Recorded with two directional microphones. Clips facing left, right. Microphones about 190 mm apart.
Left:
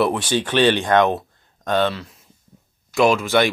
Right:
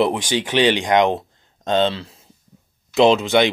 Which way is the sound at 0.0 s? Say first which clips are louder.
Even; 15° right (ahead or behind).